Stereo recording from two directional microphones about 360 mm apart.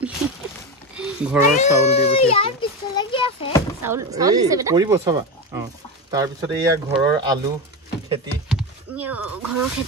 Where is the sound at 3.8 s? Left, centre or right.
Centre.